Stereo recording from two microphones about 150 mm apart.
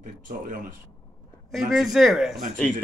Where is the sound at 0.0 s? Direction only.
65° right (ahead or behind).